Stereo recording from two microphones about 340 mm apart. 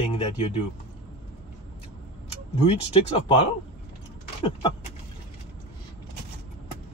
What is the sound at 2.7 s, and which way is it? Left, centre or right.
Speech, centre.